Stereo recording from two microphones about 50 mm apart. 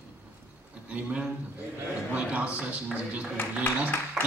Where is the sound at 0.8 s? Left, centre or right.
Right.